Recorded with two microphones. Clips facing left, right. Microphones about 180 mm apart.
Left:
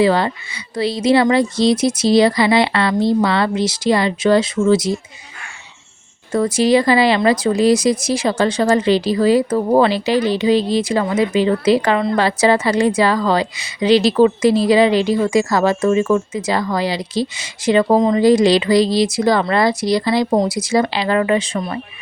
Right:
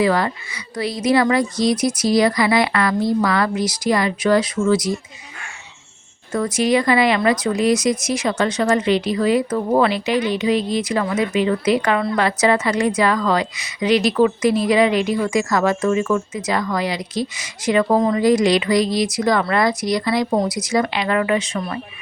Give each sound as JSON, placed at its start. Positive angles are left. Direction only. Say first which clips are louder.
{"t": 0.0, "sound": "a woman's voice", "louder": "left 3 dB", "side_deg": 30}
{"t": 6.3, "sound": "a woman's voice", "louder": "left 4 dB", "side_deg": 30}